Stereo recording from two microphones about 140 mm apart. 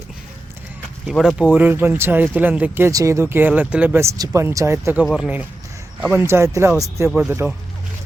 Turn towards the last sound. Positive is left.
turn(degrees=-15)  # may be behind; listen again after turning